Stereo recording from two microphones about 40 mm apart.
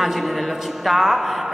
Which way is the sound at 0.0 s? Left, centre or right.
Centre.